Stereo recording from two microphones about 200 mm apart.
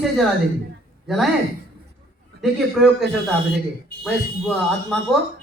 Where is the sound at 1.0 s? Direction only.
Centre (ahead or behind).